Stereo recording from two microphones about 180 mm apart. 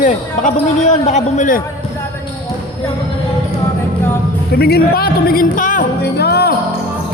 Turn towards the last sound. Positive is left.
turn(degrees=65)  # may be behind; listen again after turning